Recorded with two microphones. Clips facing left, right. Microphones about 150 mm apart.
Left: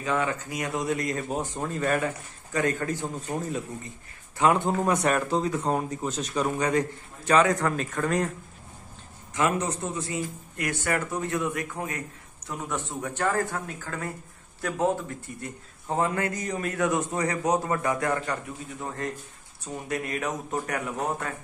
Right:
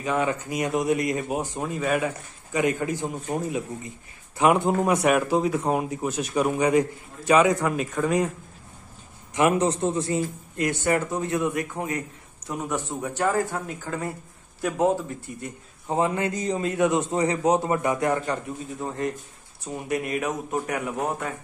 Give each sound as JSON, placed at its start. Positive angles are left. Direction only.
{"t": 0.0, "sound": "speech", "side_deg": -20}
{"t": 9.3, "sound": "a man's voice", "side_deg": -20}
{"t": 15.9, "sound": "a man's voice", "side_deg": -20}